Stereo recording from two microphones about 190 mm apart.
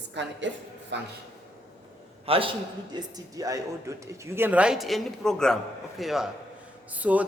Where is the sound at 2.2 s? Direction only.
30° right (ahead or behind); by 7.2 s 5° right (ahead or behind).